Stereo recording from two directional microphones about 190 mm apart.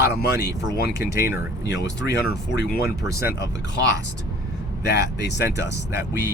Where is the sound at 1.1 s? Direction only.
15° right (ahead or behind).